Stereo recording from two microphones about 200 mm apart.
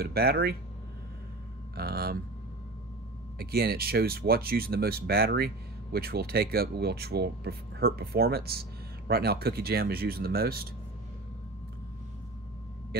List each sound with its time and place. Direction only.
0.0 s speech: 50° right (ahead or behind)
1.8 s a sound: 50° right (ahead or behind)
3.3 s speech: 50° right (ahead or behind)